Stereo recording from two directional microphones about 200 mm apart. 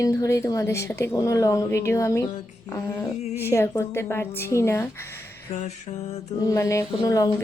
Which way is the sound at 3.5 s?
10° left (ahead or behind).